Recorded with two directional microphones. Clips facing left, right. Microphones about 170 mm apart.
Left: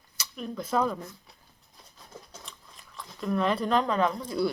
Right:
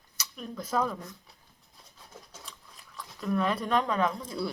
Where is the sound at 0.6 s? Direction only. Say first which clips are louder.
Left 2 dB; 30° left (ahead or behind).